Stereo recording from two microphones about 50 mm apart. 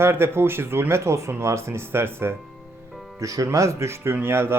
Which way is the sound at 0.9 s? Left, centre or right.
Right.